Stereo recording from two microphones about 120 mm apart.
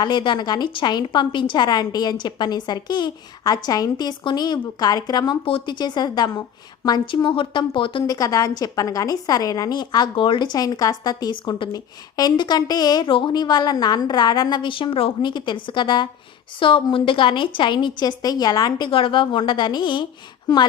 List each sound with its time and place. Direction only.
0.0 s a woman's voice: 40° left (ahead or behind)
8.0 s a woman's voice: 30° left (ahead or behind)
18.9 s a woman's voice: 45° left (ahead or behind)